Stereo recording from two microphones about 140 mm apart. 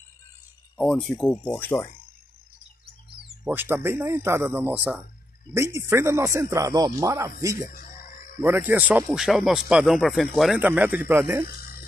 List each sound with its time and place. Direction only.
0.7 s speech: 5° left (ahead or behind)
3.4 s speech: 15° right (ahead or behind)
7.9 s a sound: 90° left
8.4 s speech: 15° right (ahead or behind)
10.6 s speech: 10° right (ahead or behind)
11.4 s a sound: 90° left